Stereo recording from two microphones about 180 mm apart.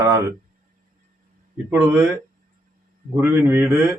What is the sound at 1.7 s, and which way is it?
Speech, 10° right (ahead or behind).